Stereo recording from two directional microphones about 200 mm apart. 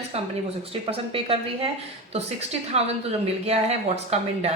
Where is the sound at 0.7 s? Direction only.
30° right (ahead or behind).